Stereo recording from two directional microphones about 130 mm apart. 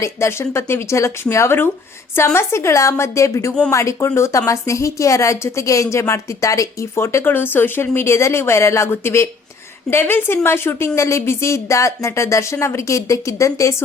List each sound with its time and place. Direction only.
0.0 s a woman's voice: 20° left (ahead or behind)